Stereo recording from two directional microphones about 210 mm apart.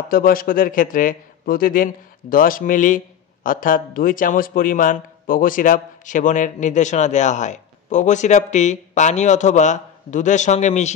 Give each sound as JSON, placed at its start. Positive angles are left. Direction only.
{"t": 0.1, "sound": "a man's voice", "side_deg": 45}